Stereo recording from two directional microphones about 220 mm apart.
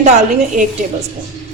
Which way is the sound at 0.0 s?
30° right (ahead or behind).